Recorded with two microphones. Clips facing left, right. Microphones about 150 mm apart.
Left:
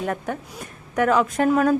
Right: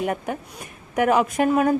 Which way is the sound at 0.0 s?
10° right (ahead or behind).